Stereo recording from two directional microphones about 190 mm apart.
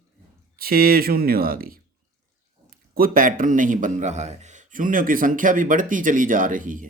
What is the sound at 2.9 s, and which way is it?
Speech, 50° right (ahead or behind).